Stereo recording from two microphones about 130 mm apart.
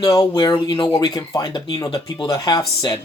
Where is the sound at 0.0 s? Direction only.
30° left (ahead or behind).